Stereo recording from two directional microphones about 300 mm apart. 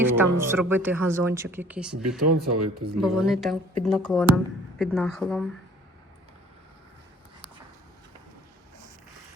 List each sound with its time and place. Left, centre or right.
0.2 s speech: centre
2.0 s speech: right
3.0 s speech: centre